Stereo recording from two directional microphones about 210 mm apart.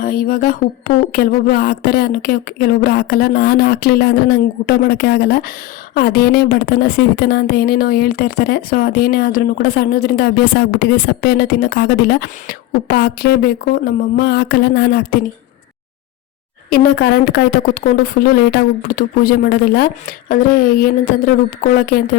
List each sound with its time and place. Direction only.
0.0 s a woman's voice: 40° left (ahead or behind)
16.6 s a woman's voice: 45° left (ahead or behind)